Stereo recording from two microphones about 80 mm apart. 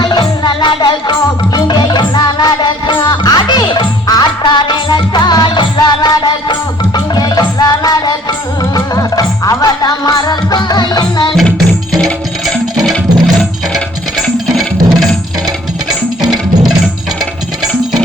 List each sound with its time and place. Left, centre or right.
0.0 s music: left
4.0 s music: left
11.9 s music: centre
14.4 s music: centre